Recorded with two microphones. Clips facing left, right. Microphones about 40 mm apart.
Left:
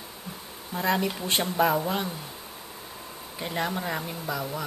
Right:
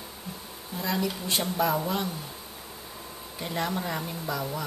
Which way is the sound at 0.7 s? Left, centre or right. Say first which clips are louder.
Left 4 dB; left.